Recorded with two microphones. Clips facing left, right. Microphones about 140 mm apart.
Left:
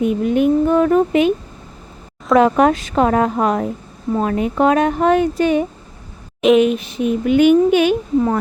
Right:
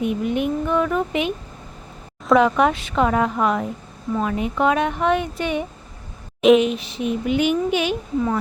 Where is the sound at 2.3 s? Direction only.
40° left (ahead or behind).